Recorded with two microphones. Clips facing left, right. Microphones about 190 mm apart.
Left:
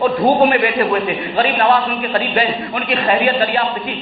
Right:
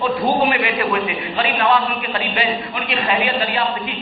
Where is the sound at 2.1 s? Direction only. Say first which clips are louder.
Left 5 dB; 45° left (ahead or behind).